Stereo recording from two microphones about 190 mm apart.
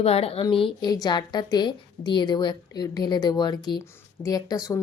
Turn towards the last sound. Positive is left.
turn(degrees=20)  # may be behind; listen again after turning